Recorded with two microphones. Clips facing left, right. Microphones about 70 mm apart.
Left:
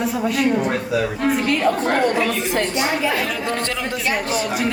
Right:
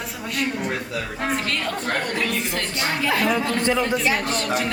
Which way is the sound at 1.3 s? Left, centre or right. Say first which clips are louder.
Left 7 dB; centre.